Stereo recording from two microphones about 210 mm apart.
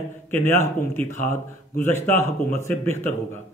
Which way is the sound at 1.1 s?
40° left (ahead or behind).